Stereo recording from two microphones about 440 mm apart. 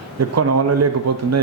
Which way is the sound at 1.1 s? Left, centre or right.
Right.